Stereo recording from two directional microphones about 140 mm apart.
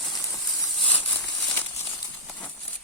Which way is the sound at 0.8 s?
10° left (ahead or behind).